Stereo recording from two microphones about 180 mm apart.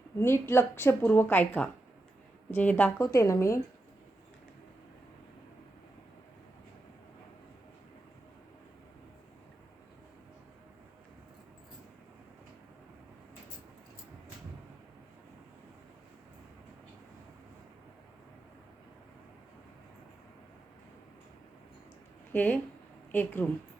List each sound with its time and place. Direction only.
0.2 s speech: 15° left (ahead or behind)
22.3 s speech: 10° left (ahead or behind)